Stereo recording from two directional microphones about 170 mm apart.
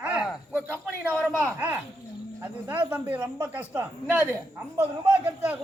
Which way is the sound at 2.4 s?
10° right (ahead or behind).